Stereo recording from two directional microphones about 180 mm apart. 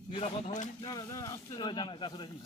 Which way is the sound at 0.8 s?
20° left (ahead or behind).